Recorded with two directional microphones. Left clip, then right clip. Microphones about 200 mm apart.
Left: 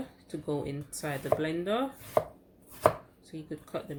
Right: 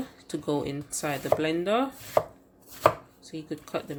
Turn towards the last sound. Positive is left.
turn(degrees=-20)  # may be behind; listen again after turning